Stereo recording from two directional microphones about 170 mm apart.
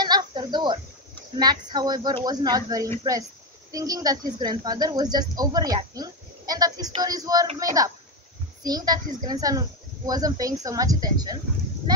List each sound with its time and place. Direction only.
0.0 s a sound: 25° right (ahead or behind)
1.4 s a woman's voice: 25° right (ahead or behind)
8.6 s a woman's voice: 25° right (ahead or behind)